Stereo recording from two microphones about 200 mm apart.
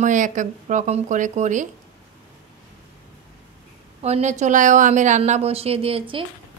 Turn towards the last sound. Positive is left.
turn(degrees=-25)  # may be behind; listen again after turning